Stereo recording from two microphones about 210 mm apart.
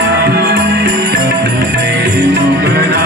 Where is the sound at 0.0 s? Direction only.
55° right (ahead or behind).